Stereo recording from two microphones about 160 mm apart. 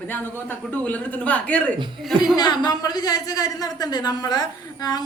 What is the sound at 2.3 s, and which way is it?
Speech, 25° left (ahead or behind).